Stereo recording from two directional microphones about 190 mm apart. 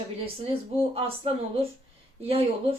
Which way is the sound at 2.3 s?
30° right (ahead or behind).